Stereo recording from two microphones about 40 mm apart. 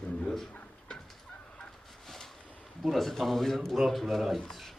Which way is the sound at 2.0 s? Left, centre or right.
Centre.